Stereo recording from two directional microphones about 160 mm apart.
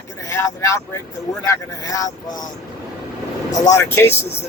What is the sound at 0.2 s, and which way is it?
Speech, 20° left (ahead or behind).